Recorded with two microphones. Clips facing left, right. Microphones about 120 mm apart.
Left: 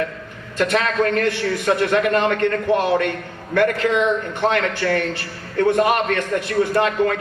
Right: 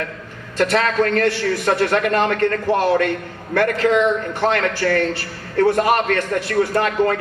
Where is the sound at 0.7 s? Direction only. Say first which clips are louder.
Right 1 dB; 35° right (ahead or behind).